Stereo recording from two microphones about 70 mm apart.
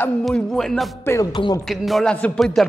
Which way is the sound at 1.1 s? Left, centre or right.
Left.